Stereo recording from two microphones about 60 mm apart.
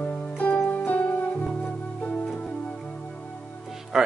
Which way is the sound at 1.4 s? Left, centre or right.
Centre.